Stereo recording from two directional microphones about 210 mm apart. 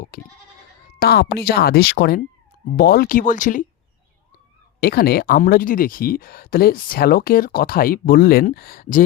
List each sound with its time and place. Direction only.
0.1 s goat: 45° left (ahead or behind)
0.9 s speech: 50° left (ahead or behind)
4.8 s speech: 45° left (ahead or behind)